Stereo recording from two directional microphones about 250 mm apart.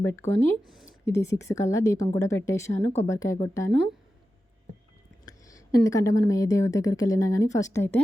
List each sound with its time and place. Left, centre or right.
0.0 s speech: centre
0.6 s speech: centre
0.9 s speech: centre
5.2 s speech: centre